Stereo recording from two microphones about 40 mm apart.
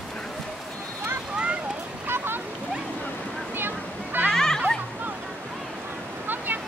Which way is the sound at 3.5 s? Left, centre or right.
Right.